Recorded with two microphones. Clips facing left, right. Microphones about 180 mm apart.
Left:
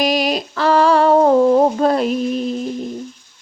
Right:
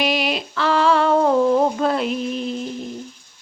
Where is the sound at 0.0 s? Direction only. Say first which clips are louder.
Left 4 dB; 40° left (ahead or behind).